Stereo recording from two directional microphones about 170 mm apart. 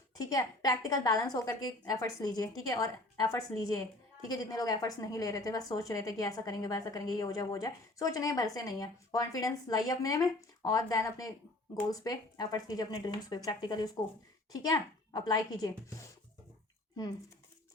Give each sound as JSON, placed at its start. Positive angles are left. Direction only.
{"t": 0.2, "sound": "a woman's voice", "side_deg": 20}